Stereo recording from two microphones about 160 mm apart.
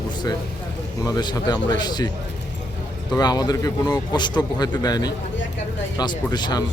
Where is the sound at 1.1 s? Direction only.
25° left (ahead or behind).